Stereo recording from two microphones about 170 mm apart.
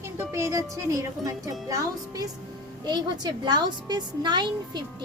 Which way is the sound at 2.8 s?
25° right (ahead or behind).